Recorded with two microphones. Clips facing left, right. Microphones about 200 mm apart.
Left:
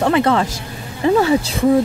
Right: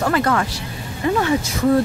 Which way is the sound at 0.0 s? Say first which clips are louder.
Left 4 dB; 25° left (ahead or behind).